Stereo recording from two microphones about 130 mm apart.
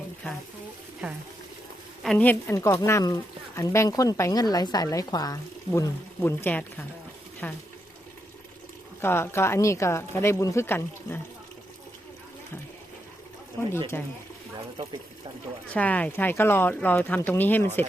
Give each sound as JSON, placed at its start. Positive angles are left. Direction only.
{"t": 2.0, "sound": "a woman's voice", "side_deg": 10}
{"t": 9.0, "sound": "a woman's voice", "side_deg": 20}
{"t": 13.6, "sound": "a woman's voice", "side_deg": 20}
{"t": 15.7, "sound": "speech", "side_deg": 10}